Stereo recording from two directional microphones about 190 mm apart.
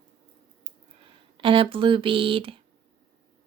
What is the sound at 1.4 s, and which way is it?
Speech, 25° right (ahead or behind).